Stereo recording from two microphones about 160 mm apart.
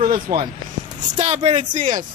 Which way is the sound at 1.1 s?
45° right (ahead or behind).